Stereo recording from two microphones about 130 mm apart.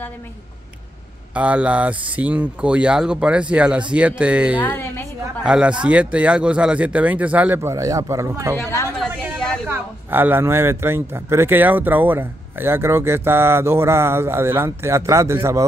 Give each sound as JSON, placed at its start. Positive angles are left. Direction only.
{"t": 1.3, "sound": "speech", "side_deg": -10}
{"t": 4.6, "sound": "a woman's voice", "side_deg": 15}
{"t": 5.4, "sound": "speech", "side_deg": -5}
{"t": 8.5, "sound": "a woman's voice", "side_deg": 20}
{"t": 9.7, "sound": "speech", "side_deg": -15}